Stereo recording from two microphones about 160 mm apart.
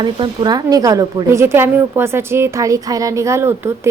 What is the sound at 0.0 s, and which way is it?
A woman's voice, 25° right (ahead or behind).